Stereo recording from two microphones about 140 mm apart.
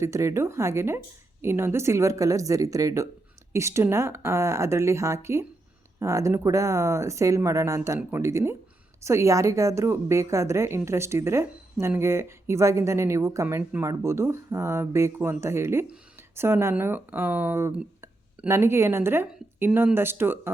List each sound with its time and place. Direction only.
0.0 s a woman's voice: 20° right (ahead or behind)